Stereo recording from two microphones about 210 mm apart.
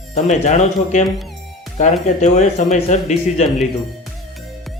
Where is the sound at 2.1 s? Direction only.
35° left (ahead or behind).